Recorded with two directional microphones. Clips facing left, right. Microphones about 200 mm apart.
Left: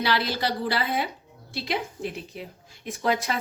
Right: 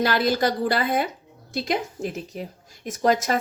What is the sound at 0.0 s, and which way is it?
A woman's voice, 45° right (ahead or behind).